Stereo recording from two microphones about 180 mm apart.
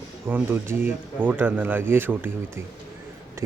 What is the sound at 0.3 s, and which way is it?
Speech, 10° right (ahead or behind).